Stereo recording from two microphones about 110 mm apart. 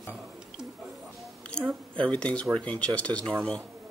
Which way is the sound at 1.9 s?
10° left (ahead or behind).